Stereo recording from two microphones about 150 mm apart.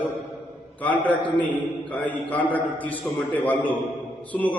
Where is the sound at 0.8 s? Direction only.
10° left (ahead or behind).